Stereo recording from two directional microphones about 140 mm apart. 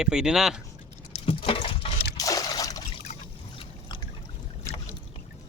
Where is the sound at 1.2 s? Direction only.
40° left (ahead or behind).